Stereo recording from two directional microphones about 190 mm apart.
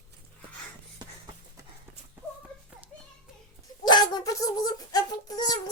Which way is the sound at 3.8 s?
25° left (ahead or behind).